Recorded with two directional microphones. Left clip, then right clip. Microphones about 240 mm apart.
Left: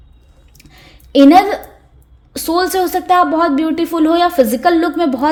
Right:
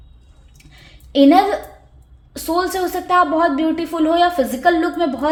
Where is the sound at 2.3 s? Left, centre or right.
Left.